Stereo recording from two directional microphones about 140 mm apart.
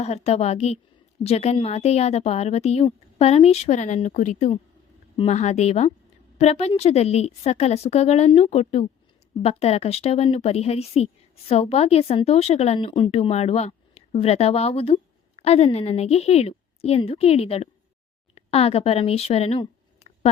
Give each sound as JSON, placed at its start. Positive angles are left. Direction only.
{"t": 0.0, "sound": "a woman's voice", "side_deg": 50}
{"t": 5.1, "sound": "a woman's voice", "side_deg": 50}